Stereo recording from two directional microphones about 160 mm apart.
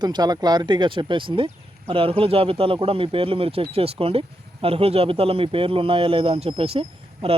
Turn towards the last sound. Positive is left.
turn(degrees=-35)  # may be behind; listen again after turning